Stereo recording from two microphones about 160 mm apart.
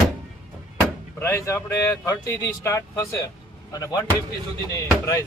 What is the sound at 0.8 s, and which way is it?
Speech, 15° left (ahead or behind).